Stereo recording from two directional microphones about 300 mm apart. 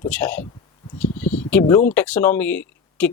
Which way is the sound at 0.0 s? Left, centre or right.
Centre.